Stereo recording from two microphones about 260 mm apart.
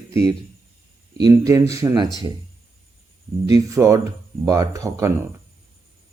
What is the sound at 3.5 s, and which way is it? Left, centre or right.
Speech, centre.